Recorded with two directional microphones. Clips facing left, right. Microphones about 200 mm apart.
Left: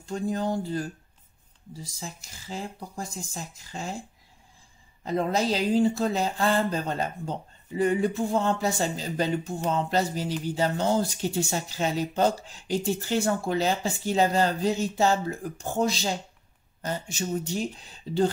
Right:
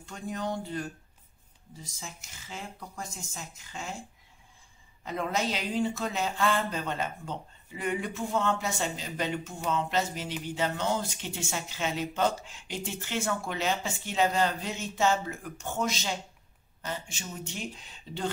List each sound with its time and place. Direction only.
0.0 s speech: 30° left (ahead or behind)
5.0 s speech: 35° left (ahead or behind)